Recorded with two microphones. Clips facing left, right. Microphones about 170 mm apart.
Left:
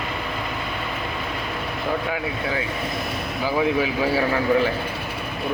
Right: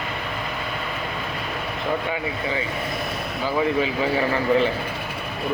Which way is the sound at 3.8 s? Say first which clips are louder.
Left 1 dB; 5° left (ahead or behind).